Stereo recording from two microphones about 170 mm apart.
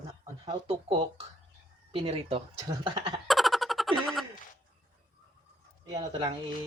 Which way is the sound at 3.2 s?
Centre (ahead or behind).